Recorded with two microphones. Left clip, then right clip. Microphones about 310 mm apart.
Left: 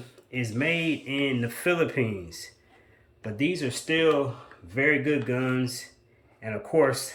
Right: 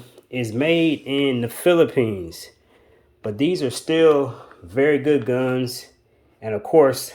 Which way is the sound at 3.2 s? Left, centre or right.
Centre.